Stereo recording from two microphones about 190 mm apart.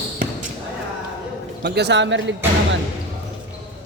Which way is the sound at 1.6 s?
65° right (ahead or behind).